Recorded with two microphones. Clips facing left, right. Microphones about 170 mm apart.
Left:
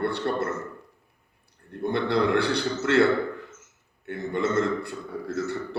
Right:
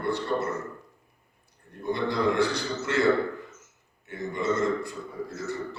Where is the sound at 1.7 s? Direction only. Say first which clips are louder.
Left 3 dB; 65° left (ahead or behind).